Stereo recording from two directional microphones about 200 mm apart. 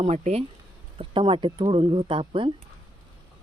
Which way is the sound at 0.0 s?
30° right (ahead or behind).